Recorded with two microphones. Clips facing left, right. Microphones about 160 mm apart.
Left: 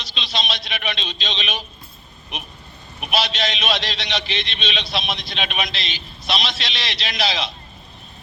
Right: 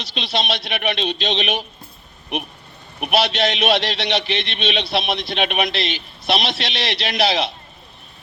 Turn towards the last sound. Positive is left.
turn(degrees=-60)  # may be behind; listen again after turning